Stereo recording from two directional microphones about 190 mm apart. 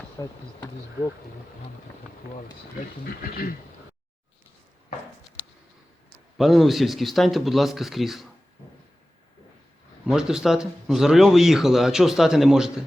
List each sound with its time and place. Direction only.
0.2 s speech: 15° left (ahead or behind)
3.0 s speech: 50° left (ahead or behind)
6.3 s speech: centre (ahead or behind)
10.1 s speech: 5° right (ahead or behind)